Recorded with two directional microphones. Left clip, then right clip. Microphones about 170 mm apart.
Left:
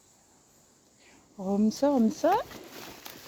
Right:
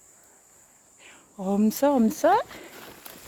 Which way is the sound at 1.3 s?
35° right (ahead or behind).